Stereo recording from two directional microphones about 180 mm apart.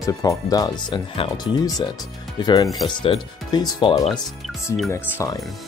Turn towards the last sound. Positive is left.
turn(degrees=15)  # may be behind; listen again after turning